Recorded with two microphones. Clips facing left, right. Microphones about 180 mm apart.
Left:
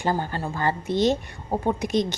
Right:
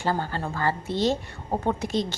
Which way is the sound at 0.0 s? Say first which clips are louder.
Left 1 dB; 20° left (ahead or behind).